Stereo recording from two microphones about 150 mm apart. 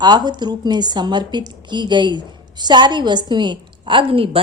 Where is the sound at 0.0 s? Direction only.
30° right (ahead or behind).